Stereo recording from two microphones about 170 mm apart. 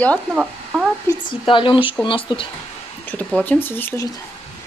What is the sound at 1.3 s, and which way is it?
A woman's voice, 30° left (ahead or behind).